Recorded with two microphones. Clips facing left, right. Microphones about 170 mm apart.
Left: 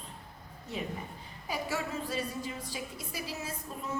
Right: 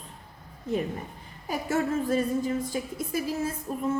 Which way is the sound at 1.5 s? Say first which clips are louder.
Right 8 dB; 50° right (ahead or behind).